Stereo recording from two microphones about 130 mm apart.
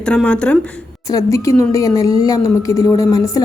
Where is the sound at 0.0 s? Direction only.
5° left (ahead or behind).